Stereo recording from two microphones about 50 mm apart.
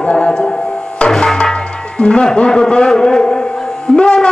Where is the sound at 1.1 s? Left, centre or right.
Centre.